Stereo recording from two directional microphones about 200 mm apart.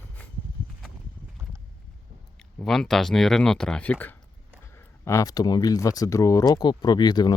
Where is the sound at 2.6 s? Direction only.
Centre (ahead or behind).